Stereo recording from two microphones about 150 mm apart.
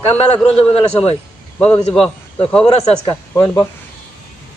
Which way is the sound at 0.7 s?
40° left (ahead or behind).